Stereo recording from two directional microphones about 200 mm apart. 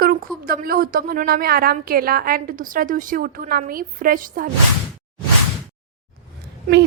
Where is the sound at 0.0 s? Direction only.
50° right (ahead or behind).